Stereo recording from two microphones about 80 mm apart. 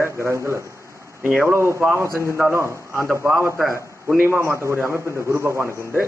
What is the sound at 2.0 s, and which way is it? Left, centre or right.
Speech, left.